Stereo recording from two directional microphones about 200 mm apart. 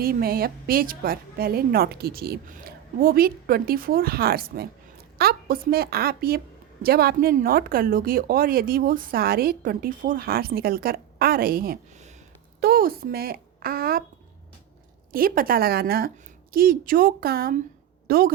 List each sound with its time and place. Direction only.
0.0 s a woman's voice: 45° right (ahead or behind)
15.1 s a woman's voice: 45° right (ahead or behind)